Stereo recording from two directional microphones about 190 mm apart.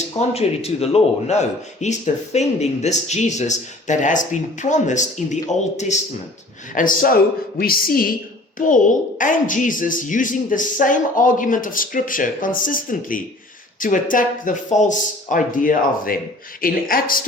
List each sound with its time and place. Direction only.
0.2 s a man's voice: 35° left (ahead or behind); by 17.2 s 50° left (ahead or behind)